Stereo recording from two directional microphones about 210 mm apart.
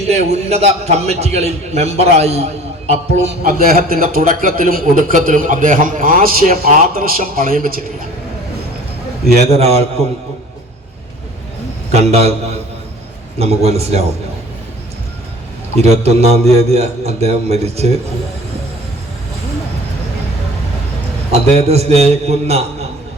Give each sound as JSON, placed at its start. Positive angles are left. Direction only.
{"t": 0.0, "sound": "a man's voice", "side_deg": -30}
{"t": 3.4, "sound": "a man's voice", "side_deg": -40}
{"t": 9.3, "sound": "a man's voice", "side_deg": -30}
{"t": 11.9, "sound": "a man's voice", "side_deg": -30}
{"t": 13.4, "sound": "a man's voice", "side_deg": -30}
{"t": 15.8, "sound": "a man's voice", "side_deg": -30}
{"t": 21.3, "sound": "a man's voice", "side_deg": -30}